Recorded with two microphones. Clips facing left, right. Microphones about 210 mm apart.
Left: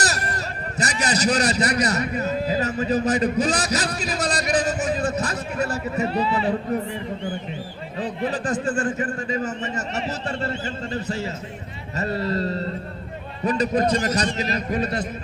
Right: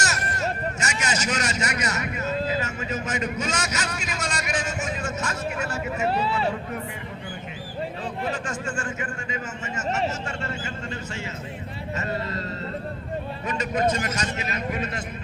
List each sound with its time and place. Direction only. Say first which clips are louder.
0.0 s a sound: left 1 dB; 35° left (ahead or behind)
2.5 s a man's voice: left 6 dB; 35° left (ahead or behind)
8.0 s a man's voice: left 8 dB; 35° left (ahead or behind)